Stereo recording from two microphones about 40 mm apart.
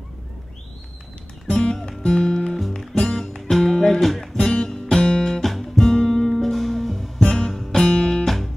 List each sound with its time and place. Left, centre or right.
1.5 s music: left
2.6 s music: centre
3.0 s music: centre
3.3 s music: centre
4.0 s music: centre
4.4 s music: centre
4.9 s guitar: centre
5.5 s music: centre
7.2 s music: centre